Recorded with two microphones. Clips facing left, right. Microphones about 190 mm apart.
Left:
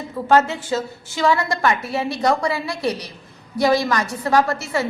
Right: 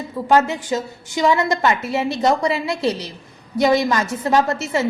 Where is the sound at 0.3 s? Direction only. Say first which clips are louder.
Even; 15° right (ahead or behind).